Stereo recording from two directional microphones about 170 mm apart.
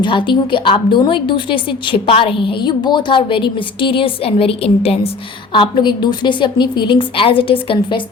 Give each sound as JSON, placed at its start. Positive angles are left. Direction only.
{"t": 0.0, "sound": "a woman's voice", "side_deg": 30}